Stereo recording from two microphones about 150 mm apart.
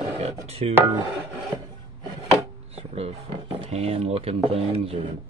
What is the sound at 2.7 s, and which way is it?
Speech, 40° right (ahead or behind).